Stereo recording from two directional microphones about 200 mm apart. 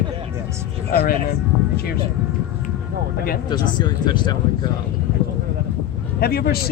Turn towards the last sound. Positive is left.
turn(degrees=50)  # may be behind; listen again after turning